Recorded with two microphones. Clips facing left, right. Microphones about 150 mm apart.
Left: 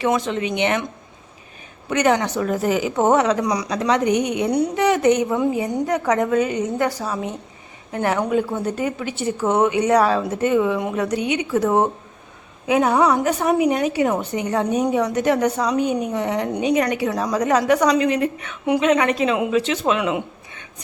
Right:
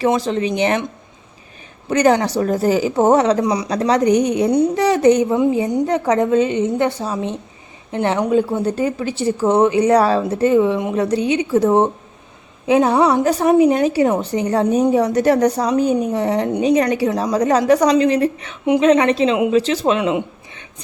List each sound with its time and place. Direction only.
0.0 s a woman's voice: 35° right (ahead or behind)
1.9 s a woman's voice: 35° right (ahead or behind)